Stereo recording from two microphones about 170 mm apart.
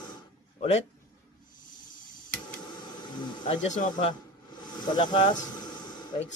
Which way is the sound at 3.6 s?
45° left (ahead or behind).